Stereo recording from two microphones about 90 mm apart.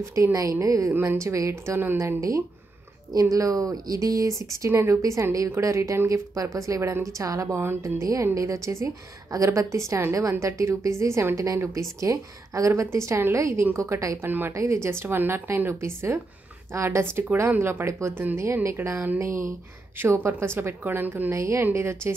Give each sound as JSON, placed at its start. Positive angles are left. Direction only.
{"t": 0.0, "sound": "a woman's voice", "side_deg": -35}